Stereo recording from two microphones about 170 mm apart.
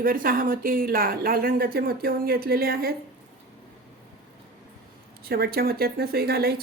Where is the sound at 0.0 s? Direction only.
55° right (ahead or behind).